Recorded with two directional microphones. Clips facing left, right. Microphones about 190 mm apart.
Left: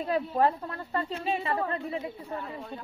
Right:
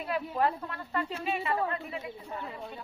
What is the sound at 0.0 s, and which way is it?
A woman's voice, 35° left (ahead or behind).